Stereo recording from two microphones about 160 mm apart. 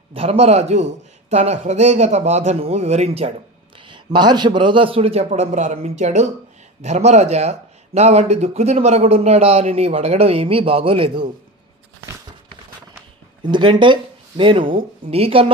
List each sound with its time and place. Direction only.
0.1 s speech: 40° right (ahead or behind)
3.9 s speech: 25° right (ahead or behind)
13.4 s speech: 30° right (ahead or behind)